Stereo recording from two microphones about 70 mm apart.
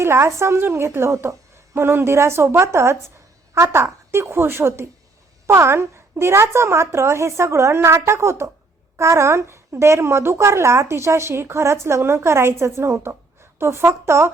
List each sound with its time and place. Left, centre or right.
0.0 s a woman's voice: right